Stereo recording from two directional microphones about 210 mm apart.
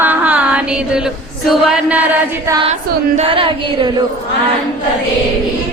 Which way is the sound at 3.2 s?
25° right (ahead or behind).